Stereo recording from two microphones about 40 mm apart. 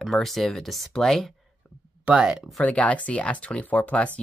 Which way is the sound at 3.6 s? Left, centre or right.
Left.